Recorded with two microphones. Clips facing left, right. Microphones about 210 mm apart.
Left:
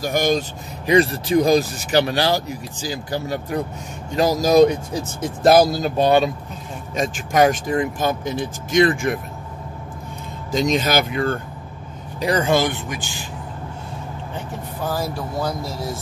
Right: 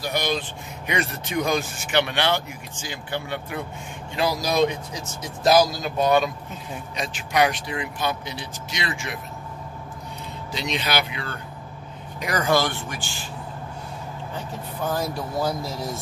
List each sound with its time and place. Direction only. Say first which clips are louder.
0.0 s speech: left 6 dB; 45° left (ahead or behind)
5.9 s speech: left 3 dB; 30° left (ahead or behind)
7.0 s speech: left 5 dB; 45° left (ahead or behind)
10.5 s speech: left 8 dB; 45° left (ahead or behind)
12.2 s speech: left 4 dB; 30° left (ahead or behind)
14.8 s speech: left 1 dB; 5° left (ahead or behind)